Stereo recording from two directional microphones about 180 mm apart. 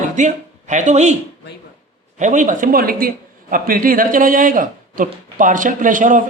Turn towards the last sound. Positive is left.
turn(degrees=-45)  # may be behind; listen again after turning